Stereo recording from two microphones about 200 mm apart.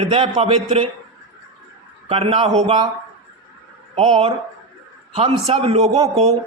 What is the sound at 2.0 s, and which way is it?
Speech, 30° right (ahead or behind).